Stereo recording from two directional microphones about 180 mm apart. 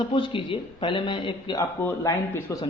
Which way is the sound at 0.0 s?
30° left (ahead or behind).